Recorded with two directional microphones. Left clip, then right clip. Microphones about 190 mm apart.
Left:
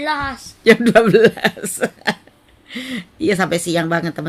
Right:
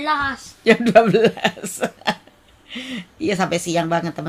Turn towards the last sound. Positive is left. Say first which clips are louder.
# left 1 dB
turn(degrees=20)  # may be behind; listen again after turning